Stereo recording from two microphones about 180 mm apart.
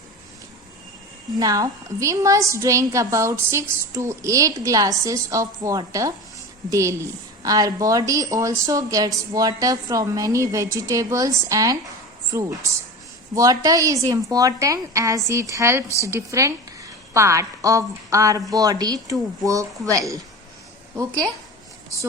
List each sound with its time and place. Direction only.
1.4 s a woman's voice: 20° right (ahead or behind)